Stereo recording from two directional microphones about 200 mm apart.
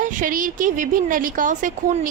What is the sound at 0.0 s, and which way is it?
A woman's voice, 40° right (ahead or behind).